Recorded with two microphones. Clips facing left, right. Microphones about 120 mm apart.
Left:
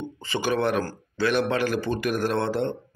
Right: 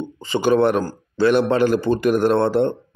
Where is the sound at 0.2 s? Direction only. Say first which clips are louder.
Right 8 dB; 25° right (ahead or behind).